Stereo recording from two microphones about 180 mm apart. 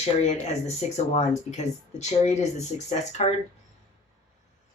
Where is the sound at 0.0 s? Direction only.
40° left (ahead or behind).